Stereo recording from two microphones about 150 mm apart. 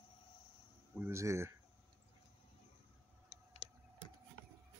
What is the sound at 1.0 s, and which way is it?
Speech, 20° right (ahead or behind).